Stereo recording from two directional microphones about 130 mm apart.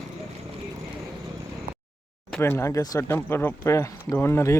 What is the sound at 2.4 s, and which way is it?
Speech, 20° left (ahead or behind).